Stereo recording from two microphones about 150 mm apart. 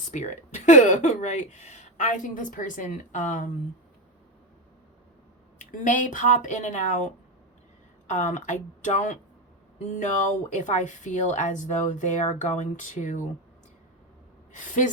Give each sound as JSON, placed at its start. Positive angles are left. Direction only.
{"t": 0.1, "sound": "speech", "side_deg": 50}
{"t": 5.5, "sound": "speech", "side_deg": 60}